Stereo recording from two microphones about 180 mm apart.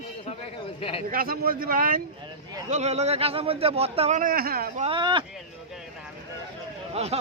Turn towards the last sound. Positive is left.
turn(degrees=-35)  # may be behind; listen again after turning